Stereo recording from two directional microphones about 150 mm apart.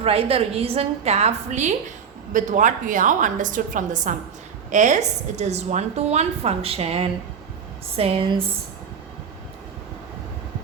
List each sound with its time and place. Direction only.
0.0 s a woman's voice: 40° right (ahead or behind)